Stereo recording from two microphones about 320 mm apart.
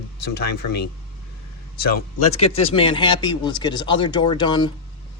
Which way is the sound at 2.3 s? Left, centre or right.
Centre.